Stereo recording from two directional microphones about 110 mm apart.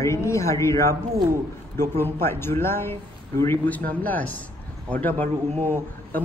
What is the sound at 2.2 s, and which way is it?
A man's voice, 20° left (ahead or behind).